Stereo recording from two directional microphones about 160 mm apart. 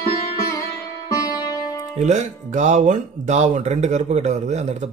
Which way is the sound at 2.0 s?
45° right (ahead or behind).